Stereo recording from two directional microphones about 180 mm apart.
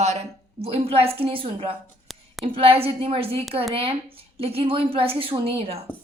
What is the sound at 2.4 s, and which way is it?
A woman's voice, 30° right (ahead or behind).